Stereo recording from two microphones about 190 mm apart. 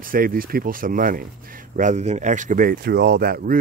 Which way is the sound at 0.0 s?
50° right (ahead or behind).